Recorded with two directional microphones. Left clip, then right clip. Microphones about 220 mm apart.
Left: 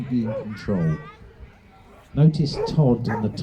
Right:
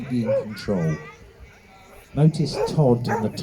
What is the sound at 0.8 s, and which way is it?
Speech, 35° left (ahead or behind).